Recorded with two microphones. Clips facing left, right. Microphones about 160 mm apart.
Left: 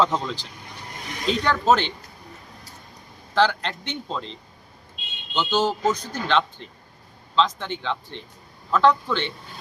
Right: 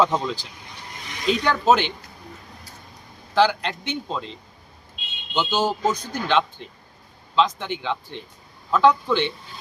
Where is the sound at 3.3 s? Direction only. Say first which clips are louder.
Right 2 dB; 10° right (ahead or behind).